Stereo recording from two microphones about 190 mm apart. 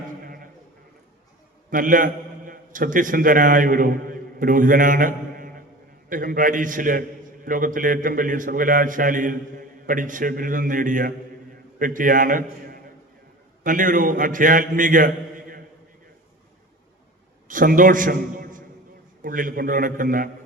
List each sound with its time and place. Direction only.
1.7 s a man's voice: 45° right (ahead or behind)
17.5 s a man's voice: 45° right (ahead or behind)